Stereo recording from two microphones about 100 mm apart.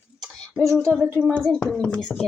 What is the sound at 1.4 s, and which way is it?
Speech, 5° left (ahead or behind).